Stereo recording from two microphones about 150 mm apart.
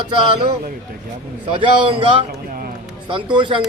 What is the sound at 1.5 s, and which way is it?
A man's voice, 35° right (ahead or behind).